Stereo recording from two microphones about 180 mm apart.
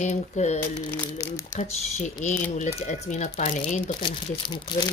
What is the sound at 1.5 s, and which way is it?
Speech, 40° left (ahead or behind).